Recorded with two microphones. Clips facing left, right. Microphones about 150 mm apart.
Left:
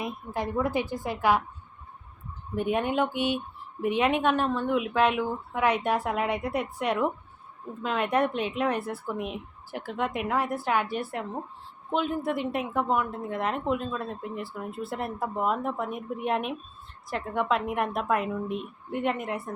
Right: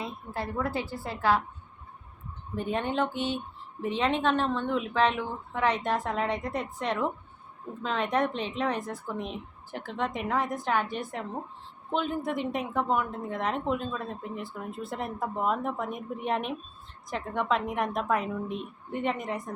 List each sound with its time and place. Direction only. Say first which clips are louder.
0.0 s speech: left 3 dB; 15° left (ahead or behind)
2.6 s a woman's voice: left 3 dB; 10° left (ahead or behind)